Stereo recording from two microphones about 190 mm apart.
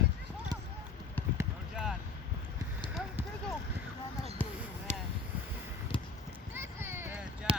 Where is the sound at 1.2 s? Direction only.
10° left (ahead or behind).